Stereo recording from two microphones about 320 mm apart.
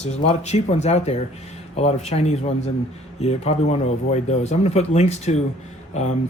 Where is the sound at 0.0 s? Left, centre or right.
Left.